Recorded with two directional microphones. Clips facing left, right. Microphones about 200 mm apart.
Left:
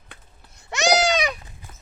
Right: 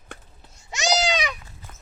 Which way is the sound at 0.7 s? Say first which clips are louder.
Left 4 dB; 60° left (ahead or behind).